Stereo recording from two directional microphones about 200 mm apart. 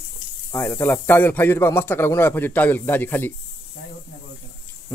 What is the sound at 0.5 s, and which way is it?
Speech, 10° left (ahead or behind).